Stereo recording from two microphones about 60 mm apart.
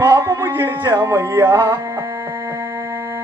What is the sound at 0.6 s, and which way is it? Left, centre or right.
Speech, right.